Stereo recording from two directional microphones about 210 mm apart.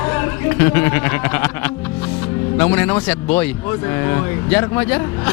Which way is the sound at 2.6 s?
10° left (ahead or behind).